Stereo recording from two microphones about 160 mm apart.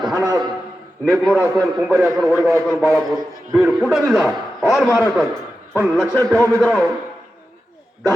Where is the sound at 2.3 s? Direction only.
15° right (ahead or behind).